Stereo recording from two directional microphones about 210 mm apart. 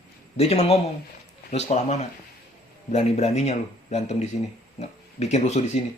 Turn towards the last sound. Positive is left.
turn(degrees=30)  # may be behind; listen again after turning